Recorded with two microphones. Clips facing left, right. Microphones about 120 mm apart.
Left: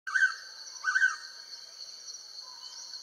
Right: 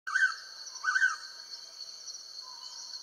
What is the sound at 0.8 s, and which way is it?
Bird, 30° right (ahead or behind).